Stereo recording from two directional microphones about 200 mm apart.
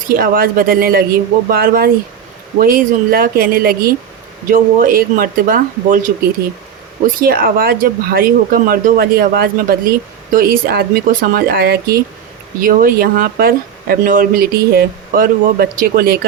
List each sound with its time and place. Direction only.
0.1 s speech: 45° right (ahead or behind)
7.2 s speech: 45° right (ahead or behind)